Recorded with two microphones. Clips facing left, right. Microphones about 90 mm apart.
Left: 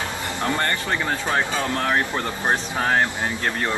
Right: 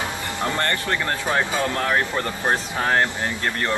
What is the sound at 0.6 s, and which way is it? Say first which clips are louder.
Speech: even; 10° left (ahead or behind).